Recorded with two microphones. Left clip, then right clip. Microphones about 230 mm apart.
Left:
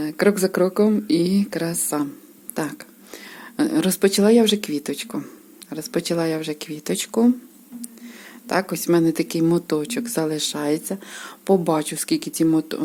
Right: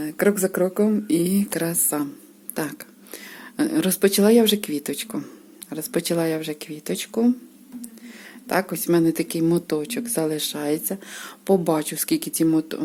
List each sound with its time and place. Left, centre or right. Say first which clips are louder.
0.0 s a woman's voice: left 2 dB; centre